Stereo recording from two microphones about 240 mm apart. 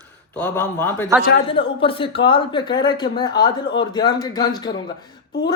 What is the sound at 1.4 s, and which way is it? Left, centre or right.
Speech, left.